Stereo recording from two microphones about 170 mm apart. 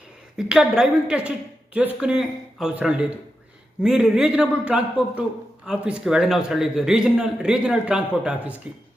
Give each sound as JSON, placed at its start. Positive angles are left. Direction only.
{"t": 0.3, "sound": "a man's voice", "side_deg": -5}